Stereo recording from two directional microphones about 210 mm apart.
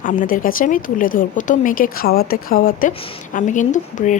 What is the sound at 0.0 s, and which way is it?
Speech, 40° left (ahead or behind).